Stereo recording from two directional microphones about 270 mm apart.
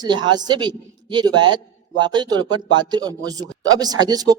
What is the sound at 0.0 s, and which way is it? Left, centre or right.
A man's voice, centre.